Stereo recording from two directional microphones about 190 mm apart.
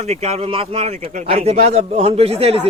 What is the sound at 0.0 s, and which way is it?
Speech, 35° right (ahead or behind).